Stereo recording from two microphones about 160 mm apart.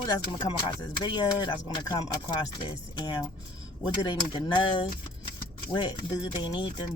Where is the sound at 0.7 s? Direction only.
30° left (ahead or behind).